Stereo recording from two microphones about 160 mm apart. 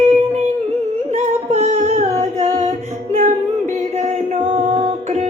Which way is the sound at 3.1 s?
45° right (ahead or behind).